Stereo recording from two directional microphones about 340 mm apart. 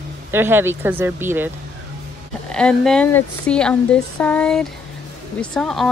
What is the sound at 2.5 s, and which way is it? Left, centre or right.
Speech, centre.